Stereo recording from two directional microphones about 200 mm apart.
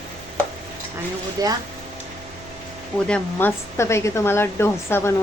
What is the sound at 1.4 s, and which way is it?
Speech, 20° right (ahead or behind).